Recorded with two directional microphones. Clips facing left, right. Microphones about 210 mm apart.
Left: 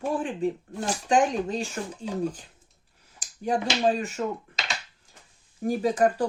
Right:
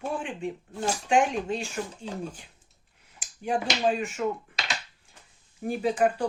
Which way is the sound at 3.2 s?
35° left (ahead or behind).